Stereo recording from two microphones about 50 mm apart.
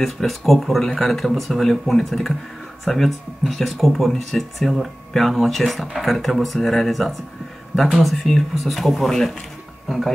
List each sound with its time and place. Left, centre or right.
0.0 s speech: centre